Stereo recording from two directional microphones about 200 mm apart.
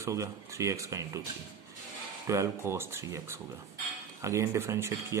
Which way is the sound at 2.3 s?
15° right (ahead or behind).